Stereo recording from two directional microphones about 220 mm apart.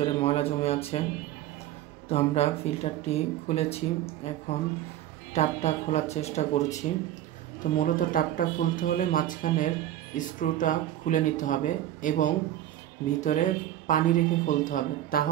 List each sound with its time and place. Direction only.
0.0 s speech: 25° left (ahead or behind)
2.0 s speech: 30° left (ahead or behind)
7.8 s speech: 40° left (ahead or behind)